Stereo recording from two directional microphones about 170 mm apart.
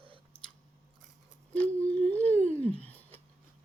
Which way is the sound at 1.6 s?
10° left (ahead or behind).